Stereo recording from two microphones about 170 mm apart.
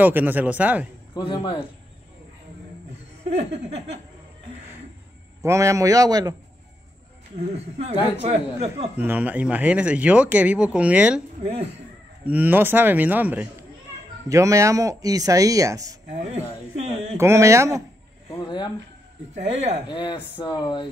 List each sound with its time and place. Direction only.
0.0 s speech: 10° right (ahead or behind)
1.1 s speech: 30° left (ahead or behind)
3.3 s speech: 40° right (ahead or behind)
5.4 s speech: 15° right (ahead or behind)
8.2 s speech: 40° right (ahead or behind)
8.9 s speech: 10° right (ahead or behind)
11.4 s speech: 40° right (ahead or behind)
12.3 s speech: 10° right (ahead or behind)
16.1 s speech: 40° right (ahead or behind)
17.2 s speech: 15° right (ahead or behind)
18.4 s speech: 25° left (ahead or behind)
19.3 s speech: 40° right (ahead or behind)
19.9 s speech: 30° left (ahead or behind)